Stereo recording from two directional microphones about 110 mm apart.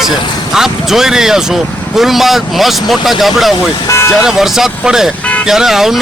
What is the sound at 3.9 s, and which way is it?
Vehicle, 25° left (ahead or behind).